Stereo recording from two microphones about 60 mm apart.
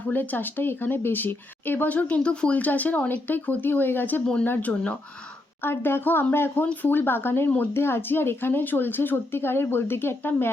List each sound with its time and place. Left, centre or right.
0.1 s speech: left